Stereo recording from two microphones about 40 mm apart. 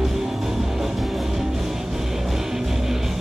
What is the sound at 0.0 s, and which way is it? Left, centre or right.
Music, centre.